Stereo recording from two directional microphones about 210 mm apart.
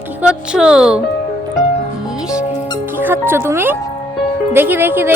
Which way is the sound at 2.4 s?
20° left (ahead or behind).